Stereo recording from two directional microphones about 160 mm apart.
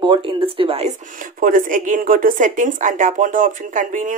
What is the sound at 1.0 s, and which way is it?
Speech, 55° right (ahead or behind).